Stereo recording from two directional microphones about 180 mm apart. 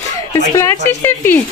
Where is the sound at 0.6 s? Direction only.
15° left (ahead or behind).